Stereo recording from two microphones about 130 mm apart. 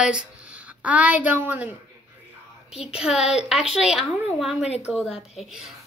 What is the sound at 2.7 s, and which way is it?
Speech, 50° left (ahead or behind).